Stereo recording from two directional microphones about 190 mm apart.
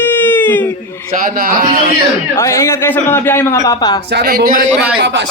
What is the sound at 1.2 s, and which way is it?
Speech, 50° right (ahead or behind).